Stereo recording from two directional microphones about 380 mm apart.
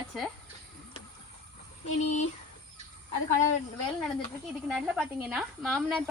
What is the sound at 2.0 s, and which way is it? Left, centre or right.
Speech, centre.